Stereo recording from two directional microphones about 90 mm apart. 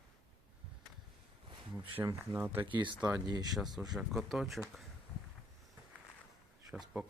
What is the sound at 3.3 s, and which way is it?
Speech, 50° right (ahead or behind).